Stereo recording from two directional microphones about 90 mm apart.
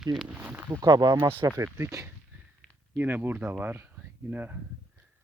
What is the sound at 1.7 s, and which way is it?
Speech, 30° right (ahead or behind).